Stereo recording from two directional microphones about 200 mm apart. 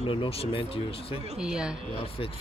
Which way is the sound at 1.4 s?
5° right (ahead or behind).